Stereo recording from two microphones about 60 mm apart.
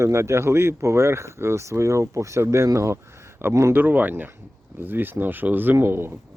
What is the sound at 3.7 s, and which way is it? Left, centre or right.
Speech, right.